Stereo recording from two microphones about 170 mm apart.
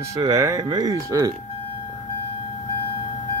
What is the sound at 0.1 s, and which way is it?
Speech, 20° right (ahead or behind).